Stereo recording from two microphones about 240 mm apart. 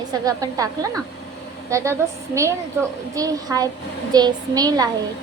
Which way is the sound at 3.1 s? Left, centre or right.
Centre.